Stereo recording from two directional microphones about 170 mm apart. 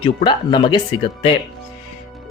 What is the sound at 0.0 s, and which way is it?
Speech, 30° left (ahead or behind).